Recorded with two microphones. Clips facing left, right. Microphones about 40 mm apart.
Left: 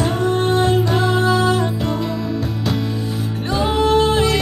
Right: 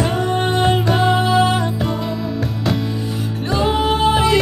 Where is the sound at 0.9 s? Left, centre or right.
Centre.